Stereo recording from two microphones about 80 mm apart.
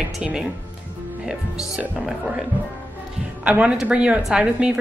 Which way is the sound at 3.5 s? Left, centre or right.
Centre.